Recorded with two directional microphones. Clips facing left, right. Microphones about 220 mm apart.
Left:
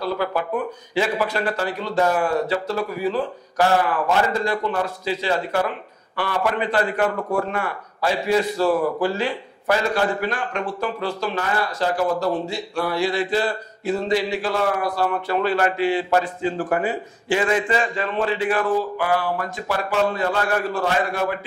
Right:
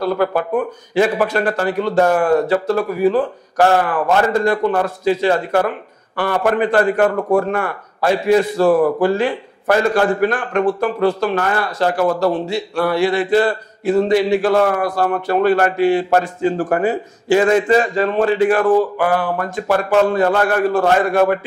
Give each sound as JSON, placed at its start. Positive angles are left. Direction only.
{"t": 0.0, "sound": "a man's voice", "side_deg": -50}